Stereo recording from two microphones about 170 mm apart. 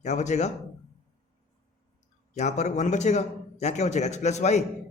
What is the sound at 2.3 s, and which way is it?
A man's voice, 45° left (ahead or behind).